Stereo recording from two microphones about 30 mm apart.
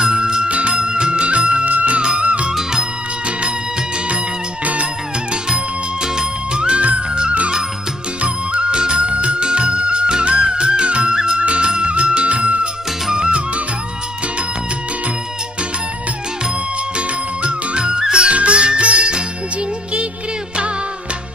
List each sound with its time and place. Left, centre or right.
0.1 s music: right
0.5 s music: right
1.7 s music: right
2.1 s music: right
6.1 s music: right
8.2 s music: right
10.5 s music: right
13.1 s music: right
17.4 s music: right
18.1 s music: right